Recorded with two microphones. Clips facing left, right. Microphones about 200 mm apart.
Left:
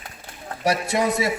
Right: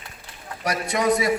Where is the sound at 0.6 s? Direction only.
25° left (ahead or behind).